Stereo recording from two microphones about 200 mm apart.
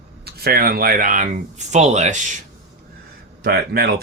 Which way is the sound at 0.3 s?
50° right (ahead or behind).